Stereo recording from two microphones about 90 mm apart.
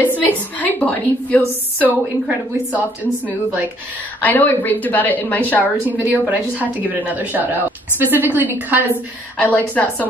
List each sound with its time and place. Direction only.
0.6 s a woman's voice: 20° left (ahead or behind)
1.4 s a woman's voice: 20° right (ahead or behind)
4.2 s a woman's voice: 20° left (ahead or behind)
5.9 s a woman's voice: 20° right (ahead or behind)
9.4 s a woman's voice: 15° left (ahead or behind)